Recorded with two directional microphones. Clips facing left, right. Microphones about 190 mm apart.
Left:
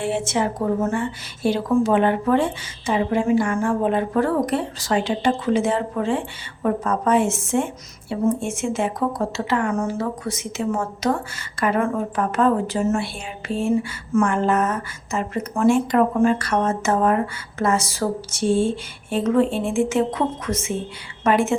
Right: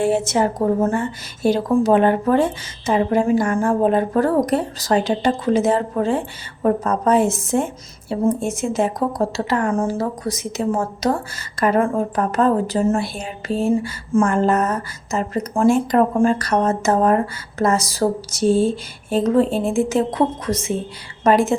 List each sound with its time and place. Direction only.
0.0 s a woman's voice: 40° right (ahead or behind)